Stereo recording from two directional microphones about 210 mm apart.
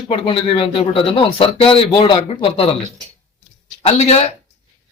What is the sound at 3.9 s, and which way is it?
Speech, 30° left (ahead or behind).